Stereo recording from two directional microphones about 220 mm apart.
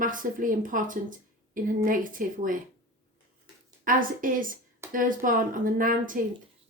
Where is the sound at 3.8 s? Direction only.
40° right (ahead or behind).